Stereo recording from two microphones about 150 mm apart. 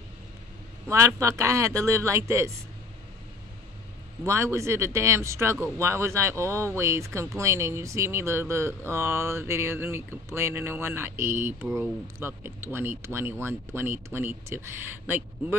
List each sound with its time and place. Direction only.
0.8 s a man's voice: 20° right (ahead or behind)
4.2 s speech: 20° right (ahead or behind)